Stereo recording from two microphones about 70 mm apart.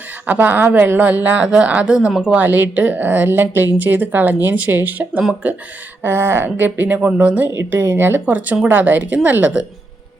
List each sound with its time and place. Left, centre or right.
0.3 s a woman's voice: right
2.4 s a woman's voice: right
6.0 s speech: right
6.7 s a woman's voice: right
7.7 s speech: right
8.2 s a woman's voice: right